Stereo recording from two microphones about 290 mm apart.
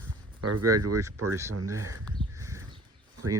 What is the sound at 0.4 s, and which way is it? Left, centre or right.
Speech, right.